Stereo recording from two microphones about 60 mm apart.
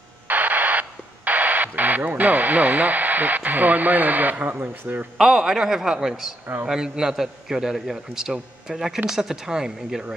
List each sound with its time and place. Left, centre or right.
0.3 s radio: right
4.6 s speech: right
5.1 s a man's voice: centre